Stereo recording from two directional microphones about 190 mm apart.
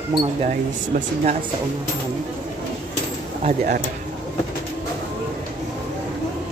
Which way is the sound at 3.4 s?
45° right (ahead or behind).